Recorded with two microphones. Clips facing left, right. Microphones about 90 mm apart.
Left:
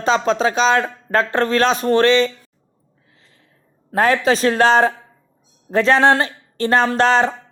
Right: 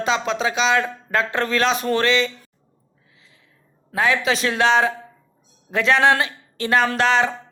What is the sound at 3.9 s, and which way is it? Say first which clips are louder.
Speech: left 4 dB; 45° left (ahead or behind).